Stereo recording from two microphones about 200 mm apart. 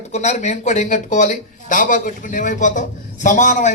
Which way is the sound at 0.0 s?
35° left (ahead or behind).